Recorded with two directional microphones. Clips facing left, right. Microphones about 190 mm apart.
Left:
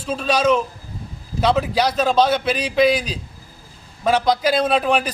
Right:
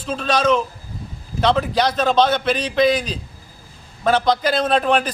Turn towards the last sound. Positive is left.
turn(degrees=5)  # may be behind; listen again after turning